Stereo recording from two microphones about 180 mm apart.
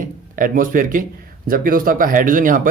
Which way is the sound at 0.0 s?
50° right (ahead or behind).